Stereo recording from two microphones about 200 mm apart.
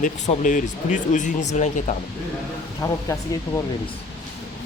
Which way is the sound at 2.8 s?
15° left (ahead or behind).